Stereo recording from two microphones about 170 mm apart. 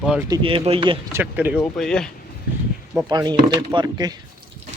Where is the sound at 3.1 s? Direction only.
25° right (ahead or behind).